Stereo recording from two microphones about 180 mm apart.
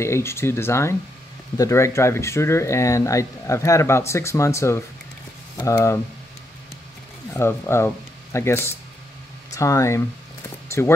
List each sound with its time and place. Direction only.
0.0 s speech: 15° left (ahead or behind)
7.3 s speech: 15° left (ahead or behind)